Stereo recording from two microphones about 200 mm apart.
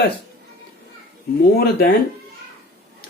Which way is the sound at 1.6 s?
50° left (ahead or behind).